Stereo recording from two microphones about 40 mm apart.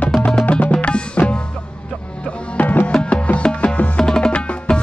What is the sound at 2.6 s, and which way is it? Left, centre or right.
Music, left.